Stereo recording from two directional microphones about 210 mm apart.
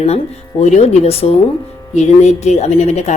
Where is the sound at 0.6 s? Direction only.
30° left (ahead or behind).